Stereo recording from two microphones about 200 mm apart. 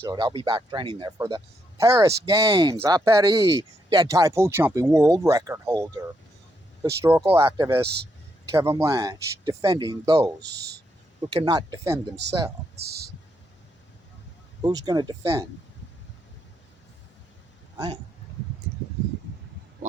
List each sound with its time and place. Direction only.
0.0 s speech: 20° right (ahead or behind)
10.4 s speech: 55° right (ahead or behind)
11.2 s speech: 20° right (ahead or behind)
12.8 s speech: 55° right (ahead or behind)
14.6 s speech: 20° right (ahead or behind)